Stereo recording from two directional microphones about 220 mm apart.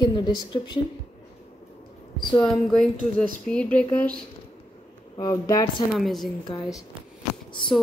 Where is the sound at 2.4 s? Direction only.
Centre (ahead or behind).